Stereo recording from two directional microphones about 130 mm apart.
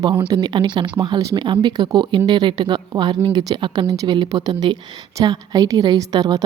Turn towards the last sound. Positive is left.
turn(degrees=-30)  # may be behind; listen again after turning